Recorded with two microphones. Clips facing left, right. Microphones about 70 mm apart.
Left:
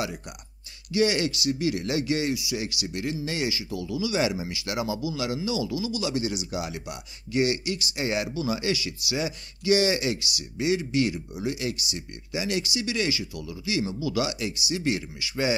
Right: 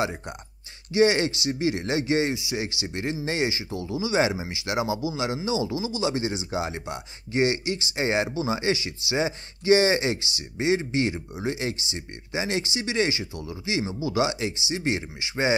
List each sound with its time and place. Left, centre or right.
0.9 s speech: right